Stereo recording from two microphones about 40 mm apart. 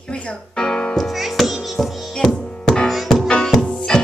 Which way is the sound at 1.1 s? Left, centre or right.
Centre.